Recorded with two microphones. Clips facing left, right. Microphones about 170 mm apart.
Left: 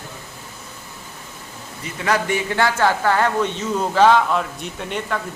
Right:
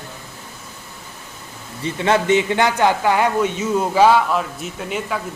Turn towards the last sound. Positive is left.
turn(degrees=-5)  # may be behind; listen again after turning